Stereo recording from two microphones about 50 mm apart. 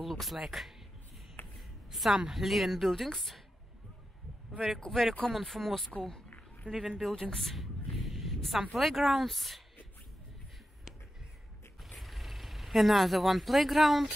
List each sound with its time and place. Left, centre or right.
0.0 s speech: centre
1.4 s a sound: left
1.9 s speech: centre
4.5 s a man's voice: centre
7.2 s a sound: centre
8.5 s speech: centre
12.0 s speech: centre